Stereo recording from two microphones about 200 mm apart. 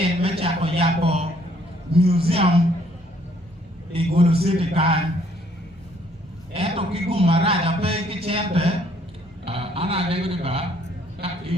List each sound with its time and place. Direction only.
0.0 s a sound: 30° right (ahead or behind)
1.9 s a man's voice: 30° right (ahead or behind)
3.9 s a man's voice: 30° right (ahead or behind)
6.5 s a man's voice: 30° right (ahead or behind)